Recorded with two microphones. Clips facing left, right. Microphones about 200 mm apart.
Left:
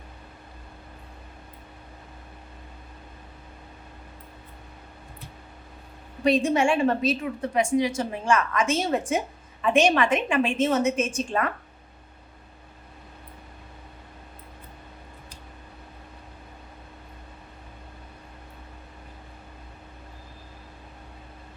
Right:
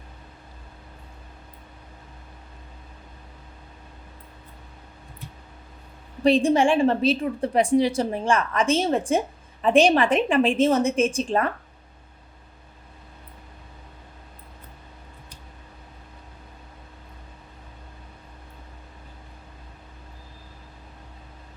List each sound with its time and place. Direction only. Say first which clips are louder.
6.2 s a woman's voice: right 3 dB; 30° right (ahead or behind)